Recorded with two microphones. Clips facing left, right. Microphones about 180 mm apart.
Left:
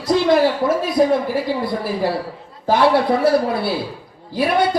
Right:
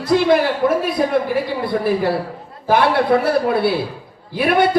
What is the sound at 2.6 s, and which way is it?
A man's voice, 55° right (ahead or behind).